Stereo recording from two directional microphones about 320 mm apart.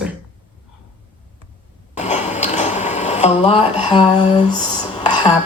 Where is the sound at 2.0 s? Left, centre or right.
Left.